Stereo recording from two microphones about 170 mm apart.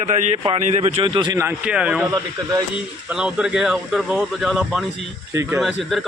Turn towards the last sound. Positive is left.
turn(degrees=0)  # may be behind; listen again after turning